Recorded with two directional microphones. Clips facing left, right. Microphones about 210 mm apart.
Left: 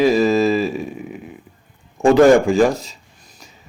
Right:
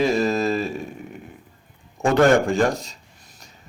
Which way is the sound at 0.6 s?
90° left.